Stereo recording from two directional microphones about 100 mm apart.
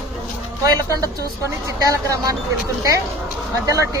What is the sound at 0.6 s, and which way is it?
Speech, 35° right (ahead or behind).